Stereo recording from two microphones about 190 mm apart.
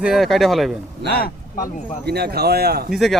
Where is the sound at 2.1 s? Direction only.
55° right (ahead or behind).